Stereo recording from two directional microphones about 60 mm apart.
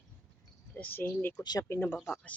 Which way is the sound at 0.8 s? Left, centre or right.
Left.